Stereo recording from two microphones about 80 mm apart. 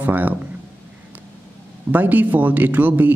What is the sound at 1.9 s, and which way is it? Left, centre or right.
Speech, right.